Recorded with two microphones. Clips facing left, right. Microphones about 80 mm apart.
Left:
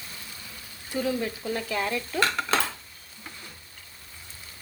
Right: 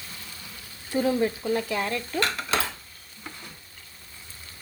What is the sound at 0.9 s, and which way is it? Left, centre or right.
Speech, right.